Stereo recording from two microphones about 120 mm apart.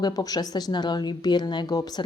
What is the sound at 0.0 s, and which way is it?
A woman's voice, 30° left (ahead or behind).